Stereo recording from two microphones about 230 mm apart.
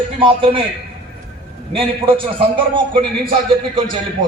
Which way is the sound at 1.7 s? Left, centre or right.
Right.